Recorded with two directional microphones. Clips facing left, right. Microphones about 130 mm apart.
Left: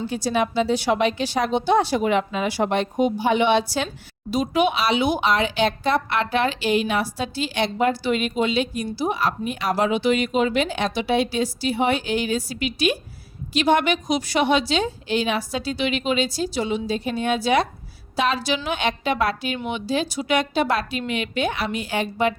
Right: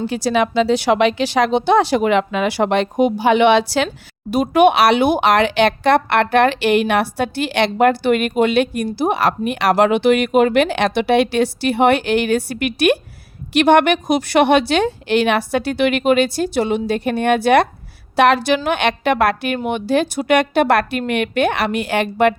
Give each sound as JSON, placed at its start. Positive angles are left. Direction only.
{"t": 0.1, "sound": "speech", "side_deg": -90}
{"t": 3.8, "sound": "speech", "side_deg": -55}